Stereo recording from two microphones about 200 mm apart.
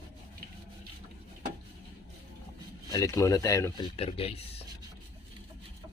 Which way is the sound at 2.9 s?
15° left (ahead or behind).